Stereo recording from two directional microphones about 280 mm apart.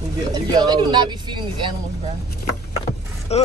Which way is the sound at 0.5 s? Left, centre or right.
Centre.